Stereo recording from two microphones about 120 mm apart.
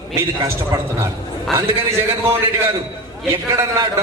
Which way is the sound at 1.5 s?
20° right (ahead or behind).